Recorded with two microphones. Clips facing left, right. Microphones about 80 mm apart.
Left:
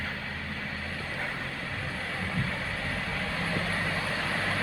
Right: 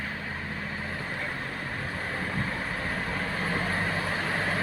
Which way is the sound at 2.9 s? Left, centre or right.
Right.